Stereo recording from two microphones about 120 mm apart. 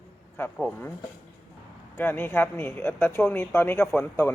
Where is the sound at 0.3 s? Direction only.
15° left (ahead or behind).